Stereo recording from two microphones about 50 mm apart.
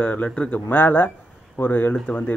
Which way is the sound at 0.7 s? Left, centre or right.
Left.